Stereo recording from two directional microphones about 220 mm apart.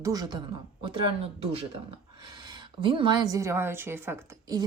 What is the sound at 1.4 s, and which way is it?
Speech, 25° right (ahead or behind).